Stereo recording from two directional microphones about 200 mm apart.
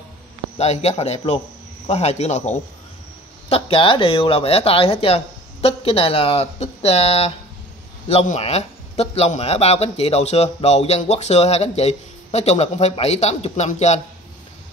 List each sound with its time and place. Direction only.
0.6 s a man's voice: 30° left (ahead or behind)